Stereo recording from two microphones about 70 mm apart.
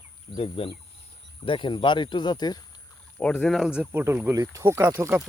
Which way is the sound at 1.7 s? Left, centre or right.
Left.